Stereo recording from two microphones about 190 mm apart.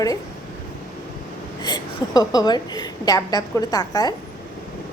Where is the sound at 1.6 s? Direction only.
20° left (ahead or behind).